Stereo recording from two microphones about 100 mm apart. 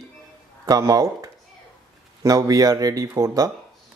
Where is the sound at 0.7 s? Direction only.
35° right (ahead or behind).